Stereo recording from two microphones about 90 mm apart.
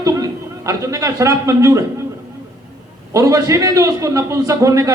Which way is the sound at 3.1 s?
35° right (ahead or behind).